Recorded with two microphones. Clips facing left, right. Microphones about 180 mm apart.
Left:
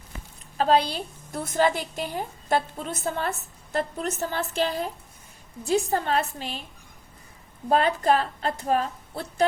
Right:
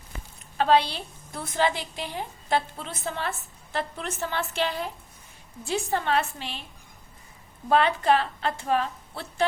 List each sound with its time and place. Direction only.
0.5 s a woman's voice: 40° left (ahead or behind)
7.7 s a woman's voice: 40° left (ahead or behind)